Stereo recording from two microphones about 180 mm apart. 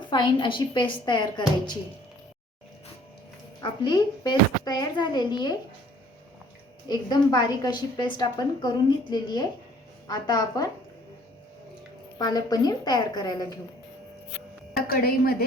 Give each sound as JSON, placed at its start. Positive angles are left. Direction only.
{"t": 0.1, "sound": "a woman's voice", "side_deg": 25}
{"t": 3.6, "sound": "a woman's voice", "side_deg": 25}
{"t": 6.8, "sound": "a woman's voice", "side_deg": 25}
{"t": 12.2, "sound": "a woman's voice", "side_deg": 20}
{"t": 14.8, "sound": "a woman's voice", "side_deg": 55}